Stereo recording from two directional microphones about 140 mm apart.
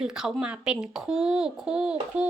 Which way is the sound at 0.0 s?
5° right (ahead or behind).